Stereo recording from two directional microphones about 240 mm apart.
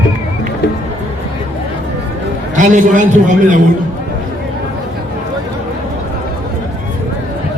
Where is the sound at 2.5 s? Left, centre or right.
Right.